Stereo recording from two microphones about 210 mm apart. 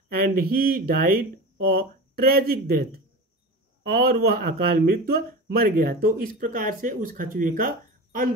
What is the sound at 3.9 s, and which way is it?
Speech, 50° right (ahead or behind).